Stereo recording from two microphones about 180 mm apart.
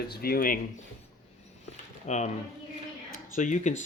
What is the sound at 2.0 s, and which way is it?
Speech, 40° left (ahead or behind).